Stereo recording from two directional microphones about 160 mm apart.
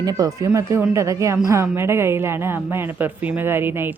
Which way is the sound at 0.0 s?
20° right (ahead or behind).